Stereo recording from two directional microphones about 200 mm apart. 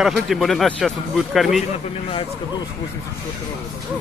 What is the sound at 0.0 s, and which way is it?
Speech, centre (ahead or behind).